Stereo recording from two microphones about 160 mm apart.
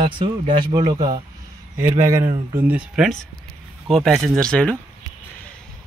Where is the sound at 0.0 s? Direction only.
35° right (ahead or behind).